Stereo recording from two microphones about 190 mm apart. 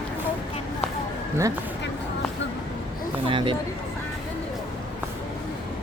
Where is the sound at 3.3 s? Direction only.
25° right (ahead or behind).